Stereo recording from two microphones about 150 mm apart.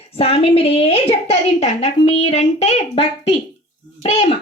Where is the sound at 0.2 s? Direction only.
40° left (ahead or behind).